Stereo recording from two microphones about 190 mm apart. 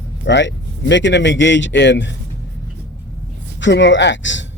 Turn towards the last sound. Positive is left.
turn(degrees=75)  # may be behind; listen again after turning